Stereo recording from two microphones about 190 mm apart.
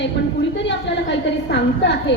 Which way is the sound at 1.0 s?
65° left (ahead or behind).